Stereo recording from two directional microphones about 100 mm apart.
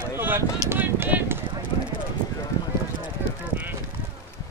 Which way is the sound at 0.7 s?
20° right (ahead or behind).